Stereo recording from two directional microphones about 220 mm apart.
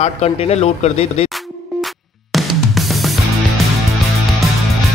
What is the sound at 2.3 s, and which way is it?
Music, centre (ahead or behind).